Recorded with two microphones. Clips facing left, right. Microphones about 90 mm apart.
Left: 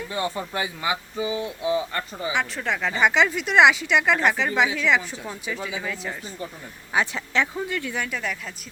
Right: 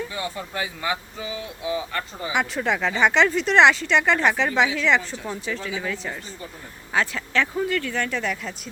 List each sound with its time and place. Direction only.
0.1 s speech: 35° left (ahead or behind)
0.5 s speech: 15° left (ahead or behind)
2.3 s speech: 5° right (ahead or behind)
6.9 s speech: 20° left (ahead or behind); by 8.5 s centre (ahead or behind)